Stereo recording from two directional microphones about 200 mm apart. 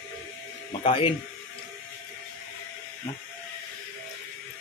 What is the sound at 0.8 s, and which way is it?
Speech, 30° left (ahead or behind).